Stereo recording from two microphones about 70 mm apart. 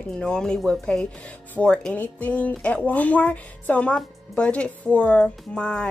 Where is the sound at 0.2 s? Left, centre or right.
Centre.